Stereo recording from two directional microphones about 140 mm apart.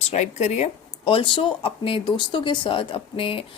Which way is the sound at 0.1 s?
55° left (ahead or behind).